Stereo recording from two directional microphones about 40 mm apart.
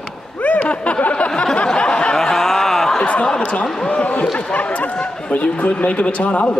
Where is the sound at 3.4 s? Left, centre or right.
Left.